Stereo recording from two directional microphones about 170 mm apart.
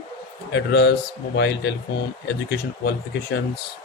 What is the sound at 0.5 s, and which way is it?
A man's voice, 75° left (ahead or behind).